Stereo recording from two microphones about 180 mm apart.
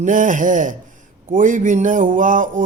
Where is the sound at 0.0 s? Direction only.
45° right (ahead or behind).